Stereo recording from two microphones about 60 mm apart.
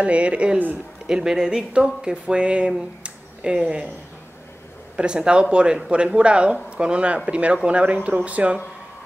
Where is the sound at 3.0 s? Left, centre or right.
Centre.